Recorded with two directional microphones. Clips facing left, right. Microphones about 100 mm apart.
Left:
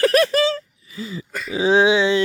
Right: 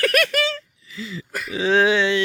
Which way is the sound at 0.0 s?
30° left (ahead or behind).